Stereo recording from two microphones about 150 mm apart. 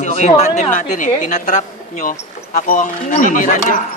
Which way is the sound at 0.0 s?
55° left (ahead or behind).